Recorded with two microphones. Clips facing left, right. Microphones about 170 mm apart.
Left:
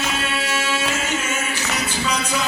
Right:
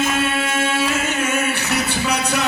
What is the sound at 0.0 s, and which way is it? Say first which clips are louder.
Music: right 5 dB; 50° right (ahead or behind).